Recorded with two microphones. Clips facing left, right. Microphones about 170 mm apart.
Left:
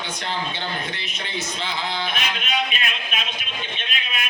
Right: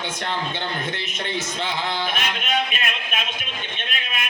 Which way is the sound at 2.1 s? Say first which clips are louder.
Right 1 dB; 50° right (ahead or behind).